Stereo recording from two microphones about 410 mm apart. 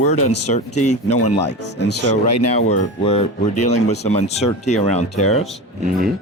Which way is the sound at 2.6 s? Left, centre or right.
Centre.